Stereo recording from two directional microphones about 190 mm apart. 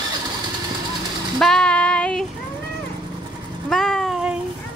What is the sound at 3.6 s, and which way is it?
Cat, centre (ahead or behind).